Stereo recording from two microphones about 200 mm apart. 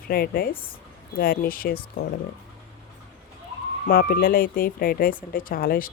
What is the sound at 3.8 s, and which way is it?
Speech, 50° left (ahead or behind).